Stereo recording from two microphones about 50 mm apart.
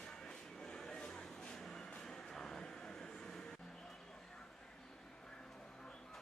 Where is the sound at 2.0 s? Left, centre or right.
Centre.